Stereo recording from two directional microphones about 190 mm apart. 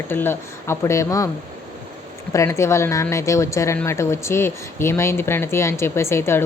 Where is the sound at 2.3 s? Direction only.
15° left (ahead or behind).